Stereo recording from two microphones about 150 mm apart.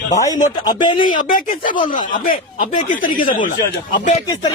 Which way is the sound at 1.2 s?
70° left (ahead or behind).